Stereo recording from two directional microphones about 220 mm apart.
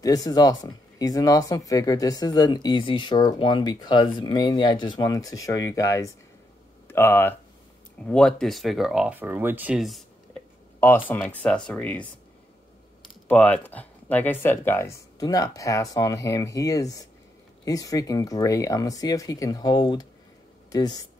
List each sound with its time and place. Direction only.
0.0 s speech: 15° left (ahead or behind)
13.3 s speech: 5° left (ahead or behind)